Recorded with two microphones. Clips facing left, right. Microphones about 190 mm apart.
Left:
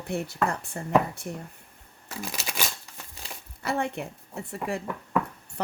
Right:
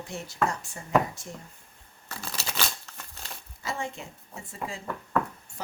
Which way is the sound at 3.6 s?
65° left (ahead or behind).